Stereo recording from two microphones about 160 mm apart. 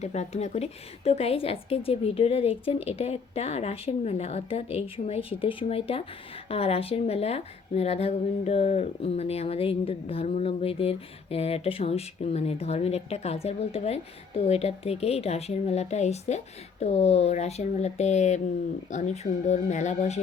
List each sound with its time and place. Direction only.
0.0 s a woman's voice: 45° left (ahead or behind)